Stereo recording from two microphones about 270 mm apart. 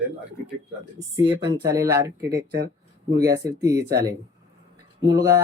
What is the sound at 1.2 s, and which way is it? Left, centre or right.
Speech, centre.